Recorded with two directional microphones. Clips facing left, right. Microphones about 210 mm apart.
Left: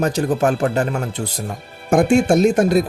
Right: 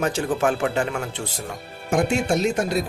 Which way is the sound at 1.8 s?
50° left (ahead or behind).